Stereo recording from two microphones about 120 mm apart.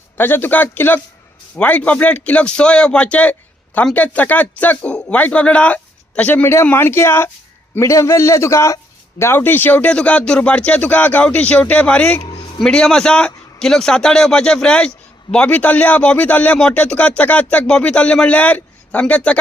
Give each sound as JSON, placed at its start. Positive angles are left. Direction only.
{"t": 0.2, "sound": "a man's voice", "side_deg": 15}